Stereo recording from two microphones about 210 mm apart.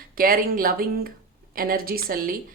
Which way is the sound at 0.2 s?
45° right (ahead or behind).